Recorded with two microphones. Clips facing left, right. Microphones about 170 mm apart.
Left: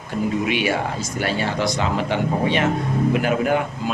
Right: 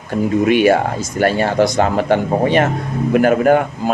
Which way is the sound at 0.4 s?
50° right (ahead or behind).